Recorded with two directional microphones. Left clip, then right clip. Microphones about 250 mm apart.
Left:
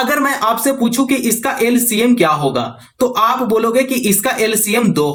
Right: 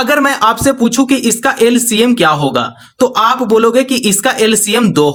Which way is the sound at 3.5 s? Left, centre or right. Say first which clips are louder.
Right 4 dB; right.